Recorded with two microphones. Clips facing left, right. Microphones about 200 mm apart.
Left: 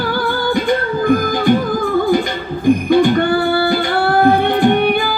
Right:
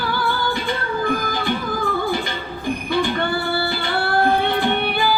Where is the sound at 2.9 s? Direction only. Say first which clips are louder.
Left 6 dB; 45° left (ahead or behind).